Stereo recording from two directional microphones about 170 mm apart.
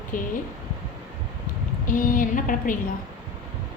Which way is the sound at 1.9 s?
50° left (ahead or behind).